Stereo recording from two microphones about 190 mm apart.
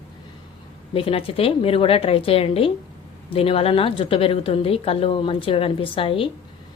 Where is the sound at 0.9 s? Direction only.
30° left (ahead or behind).